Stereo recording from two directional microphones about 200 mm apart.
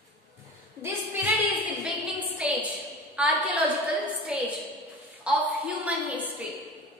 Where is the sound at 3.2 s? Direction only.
5° right (ahead or behind).